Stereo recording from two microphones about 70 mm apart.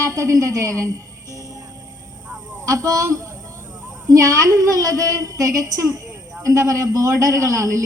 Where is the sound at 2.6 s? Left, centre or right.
Right.